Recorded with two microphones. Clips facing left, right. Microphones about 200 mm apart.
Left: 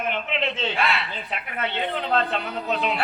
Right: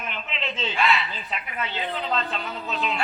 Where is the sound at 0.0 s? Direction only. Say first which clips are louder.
Left 7 dB; 60° left (ahead or behind).